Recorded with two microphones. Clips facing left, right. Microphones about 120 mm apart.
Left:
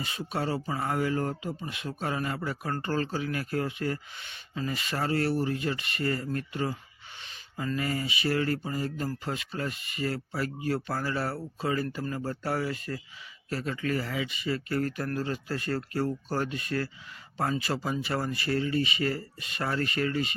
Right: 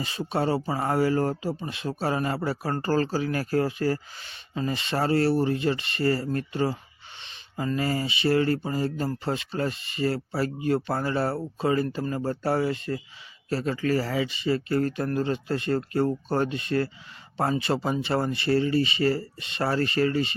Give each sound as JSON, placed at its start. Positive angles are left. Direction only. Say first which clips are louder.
{"t": 0.0, "sound": "speech", "louder": "right 5 dB", "side_deg": -30}